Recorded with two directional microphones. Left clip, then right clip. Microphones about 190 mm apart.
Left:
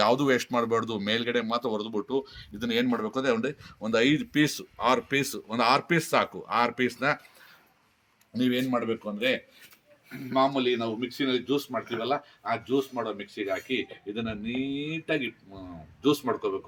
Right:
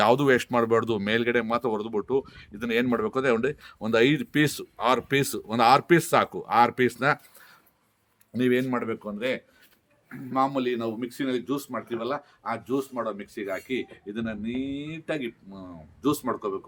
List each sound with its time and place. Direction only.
0.0 s speech: 60° right (ahead or behind)
8.3 s speech: 45° right (ahead or behind)
9.0 s speech: 20° right (ahead or behind)